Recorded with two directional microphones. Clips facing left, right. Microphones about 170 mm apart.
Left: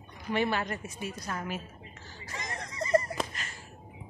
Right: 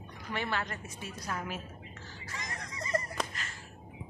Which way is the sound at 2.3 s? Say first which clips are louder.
Left 4 dB; 25° left (ahead or behind).